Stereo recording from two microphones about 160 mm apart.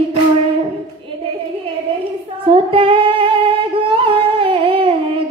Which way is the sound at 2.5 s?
35° right (ahead or behind).